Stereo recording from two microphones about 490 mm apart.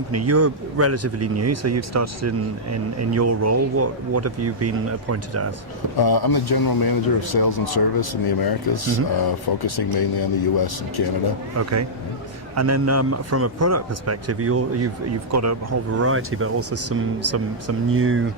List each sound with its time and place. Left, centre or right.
0.1 s speech: right
6.0 s a man's voice: left
11.6 s speech: right
17.9 s speech: right